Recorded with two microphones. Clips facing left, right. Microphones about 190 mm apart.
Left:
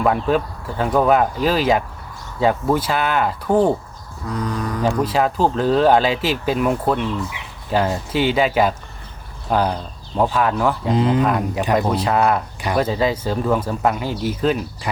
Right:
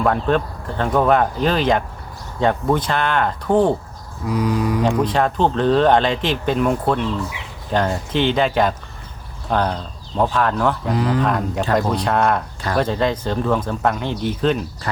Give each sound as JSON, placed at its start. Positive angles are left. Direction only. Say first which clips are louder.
{"t": 0.0, "sound": "speech", "louder": "even", "side_deg": 5}
{"t": 4.3, "sound": "a sound", "louder": "right 5 dB", "side_deg": -10}
{"t": 4.8, "sound": "speech", "louder": "left 3 dB", "side_deg": 5}
{"t": 10.8, "sound": "speech", "louder": "left 2 dB", "side_deg": 20}
{"t": 11.2, "sound": "speech", "louder": "left 1 dB", "side_deg": 5}